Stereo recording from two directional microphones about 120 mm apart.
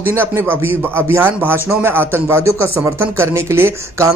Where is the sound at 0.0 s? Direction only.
20° right (ahead or behind).